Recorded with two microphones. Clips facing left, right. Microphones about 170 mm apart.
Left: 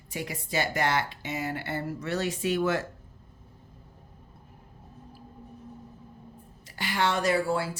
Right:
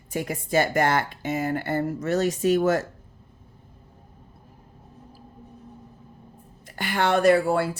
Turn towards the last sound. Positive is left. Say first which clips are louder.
# right 7 dB
turn(degrees=-60)  # may be behind; listen again after turning